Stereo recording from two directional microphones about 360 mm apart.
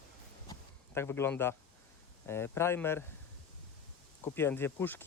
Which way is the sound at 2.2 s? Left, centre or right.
Centre.